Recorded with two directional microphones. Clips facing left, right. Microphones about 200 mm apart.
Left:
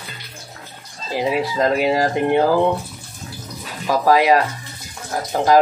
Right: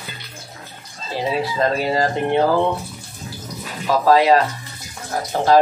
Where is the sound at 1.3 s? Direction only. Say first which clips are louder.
Left 1 dB; 15° left (ahead or behind).